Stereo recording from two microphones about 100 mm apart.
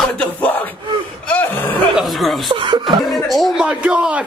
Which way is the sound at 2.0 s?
Centre (ahead or behind).